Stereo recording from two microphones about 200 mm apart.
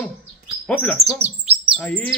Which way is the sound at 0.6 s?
5° left (ahead or behind).